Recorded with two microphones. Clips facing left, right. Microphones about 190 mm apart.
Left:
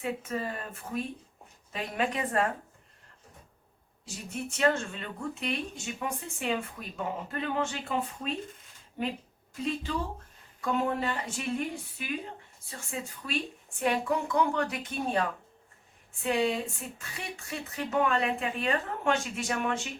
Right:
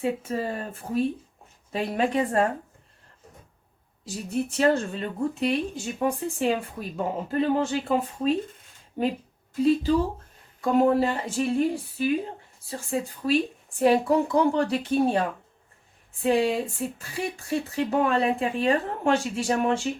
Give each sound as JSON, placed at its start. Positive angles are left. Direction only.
{"t": 0.0, "sound": "a woman's voice", "side_deg": -30}
{"t": 4.0, "sound": "a woman's voice", "side_deg": -35}
{"t": 10.6, "sound": "a woman's voice", "side_deg": -35}